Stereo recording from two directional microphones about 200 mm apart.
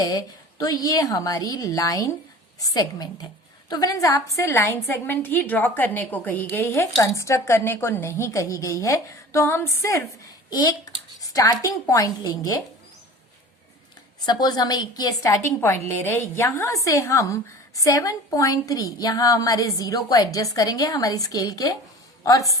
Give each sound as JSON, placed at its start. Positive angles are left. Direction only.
{"t": 0.1, "sound": "a woman's voice", "side_deg": 15}
{"t": 14.3, "sound": "a woman's voice", "side_deg": 20}